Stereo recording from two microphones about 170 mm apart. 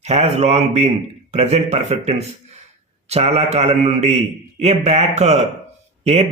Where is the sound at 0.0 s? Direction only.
40° right (ahead or behind).